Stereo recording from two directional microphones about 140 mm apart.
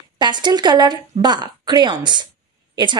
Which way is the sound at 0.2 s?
35° right (ahead or behind).